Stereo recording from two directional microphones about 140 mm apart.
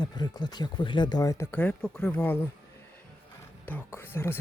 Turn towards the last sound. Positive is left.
turn(degrees=15)  # may be behind; listen again after turning